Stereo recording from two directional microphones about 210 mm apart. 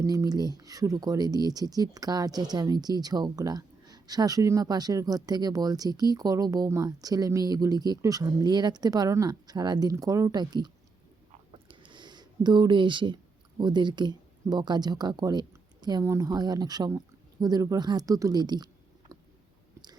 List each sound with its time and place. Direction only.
0.0 s speech: 15° right (ahead or behind)
11.7 s a sound: 25° right (ahead or behind)
13.6 s speech: 20° right (ahead or behind)